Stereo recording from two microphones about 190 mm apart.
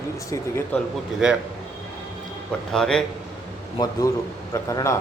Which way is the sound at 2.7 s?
5° left (ahead or behind).